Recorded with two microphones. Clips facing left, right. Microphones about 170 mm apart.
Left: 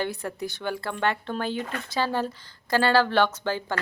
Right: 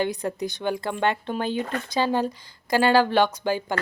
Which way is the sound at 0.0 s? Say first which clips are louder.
Right 4 dB; 15° right (ahead or behind).